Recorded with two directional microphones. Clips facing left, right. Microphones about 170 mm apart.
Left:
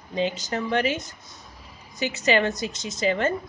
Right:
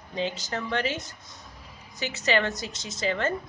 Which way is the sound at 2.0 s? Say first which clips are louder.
Left 4 dB; 15° left (ahead or behind).